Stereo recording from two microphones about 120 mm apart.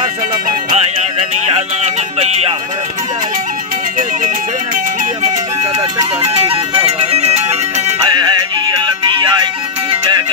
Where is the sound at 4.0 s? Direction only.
90° right.